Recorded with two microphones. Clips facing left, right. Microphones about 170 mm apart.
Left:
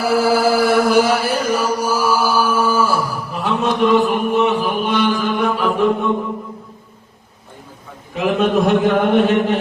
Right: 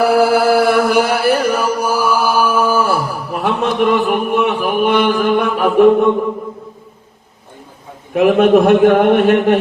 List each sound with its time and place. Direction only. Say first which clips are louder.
0.0 s chant: right 3 dB; 60° right (ahead or behind)
8.1 s a man's voice: right 7 dB; 60° right (ahead or behind)